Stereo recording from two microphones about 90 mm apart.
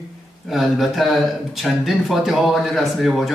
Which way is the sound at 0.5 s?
Centre (ahead or behind).